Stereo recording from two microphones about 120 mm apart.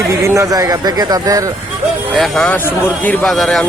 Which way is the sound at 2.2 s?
Centre (ahead or behind).